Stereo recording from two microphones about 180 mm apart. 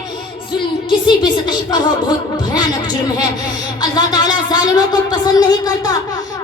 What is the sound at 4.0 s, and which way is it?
Speech, 20° left (ahead or behind).